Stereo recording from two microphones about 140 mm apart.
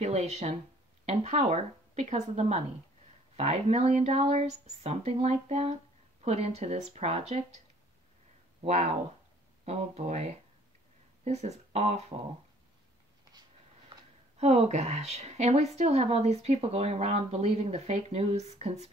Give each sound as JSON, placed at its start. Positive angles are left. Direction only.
{"t": 0.0, "sound": "speech", "side_deg": -50}
{"t": 8.6, "sound": "speech", "side_deg": -50}
{"t": 14.4, "sound": "speech", "side_deg": -55}